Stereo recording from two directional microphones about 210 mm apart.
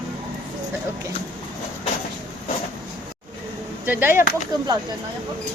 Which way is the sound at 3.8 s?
10° right (ahead or behind).